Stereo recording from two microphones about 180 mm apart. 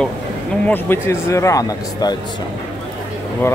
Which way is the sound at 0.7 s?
15° left (ahead or behind).